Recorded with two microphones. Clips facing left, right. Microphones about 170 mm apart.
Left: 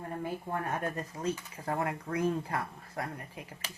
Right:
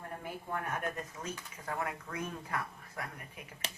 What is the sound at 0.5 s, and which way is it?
Speech, 30° left (ahead or behind).